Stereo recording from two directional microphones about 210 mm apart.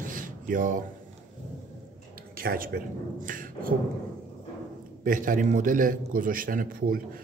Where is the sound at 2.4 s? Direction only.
45° right (ahead or behind).